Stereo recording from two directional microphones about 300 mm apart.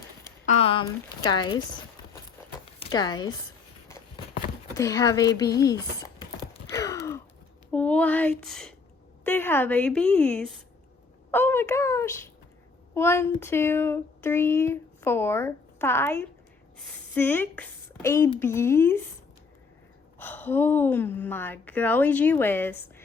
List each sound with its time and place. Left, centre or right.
0.4 s speech: left
2.7 s speech: centre
4.8 s speech: centre
6.7 s sigh: centre
7.7 s a sound: centre
9.2 s a woman's voice: centre
20.1 s speech: centre